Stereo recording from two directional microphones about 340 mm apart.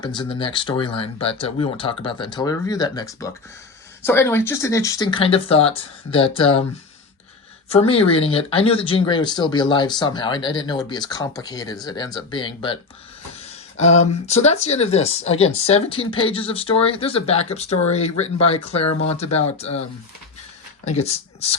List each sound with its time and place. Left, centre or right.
0.0 s speech: centre
7.8 s speech: centre
13.8 s speech: centre
20.8 s speech: centre